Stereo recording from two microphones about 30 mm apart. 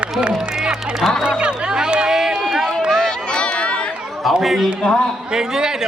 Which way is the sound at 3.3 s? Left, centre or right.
Left.